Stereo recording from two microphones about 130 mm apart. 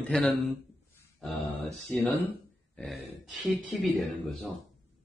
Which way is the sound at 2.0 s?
15° left (ahead or behind).